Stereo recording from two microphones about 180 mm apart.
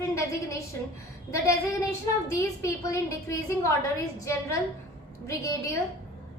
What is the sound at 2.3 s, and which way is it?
A woman's voice, 15° left (ahead or behind).